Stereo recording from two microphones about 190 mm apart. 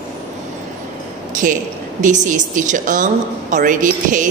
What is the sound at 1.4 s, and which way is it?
A woman's voice, 40° right (ahead or behind).